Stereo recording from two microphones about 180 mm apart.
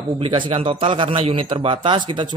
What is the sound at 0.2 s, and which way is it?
A man's voice, 30° right (ahead or behind).